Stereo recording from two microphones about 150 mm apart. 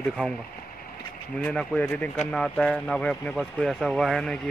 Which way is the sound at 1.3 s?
10° left (ahead or behind).